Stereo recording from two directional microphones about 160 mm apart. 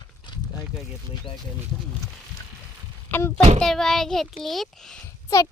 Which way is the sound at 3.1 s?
15° left (ahead or behind).